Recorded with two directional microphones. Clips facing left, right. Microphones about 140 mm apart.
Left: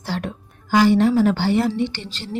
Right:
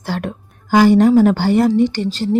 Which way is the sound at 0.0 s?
55° right (ahead or behind).